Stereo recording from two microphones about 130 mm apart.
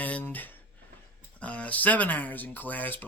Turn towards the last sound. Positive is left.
turn(degrees=15)  # may be behind; listen again after turning